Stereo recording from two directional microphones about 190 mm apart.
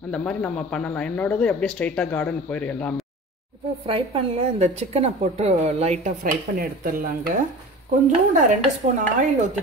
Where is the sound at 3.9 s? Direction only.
30° right (ahead or behind); by 7.1 s 50° right (ahead or behind).